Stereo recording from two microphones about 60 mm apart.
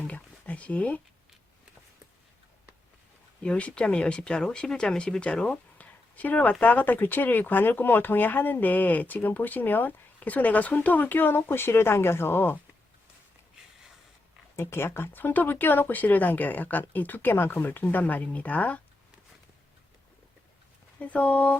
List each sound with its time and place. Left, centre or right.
0.1 s a sound: left
3.4 s speech: centre; by 12.5 s left
14.6 s speech: left
21.0 s speech: left